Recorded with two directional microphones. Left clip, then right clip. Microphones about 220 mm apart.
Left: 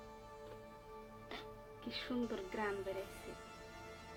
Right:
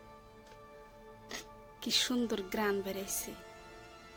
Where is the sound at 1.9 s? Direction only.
55° right (ahead or behind).